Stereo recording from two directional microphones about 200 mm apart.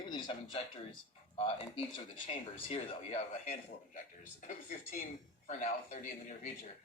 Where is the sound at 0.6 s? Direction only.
30° left (ahead or behind).